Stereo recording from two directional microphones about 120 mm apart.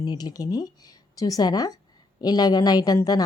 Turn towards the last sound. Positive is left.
turn(degrees=30)  # may be behind; listen again after turning